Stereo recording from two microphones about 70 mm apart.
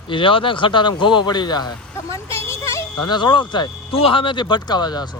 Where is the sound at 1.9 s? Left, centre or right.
Left.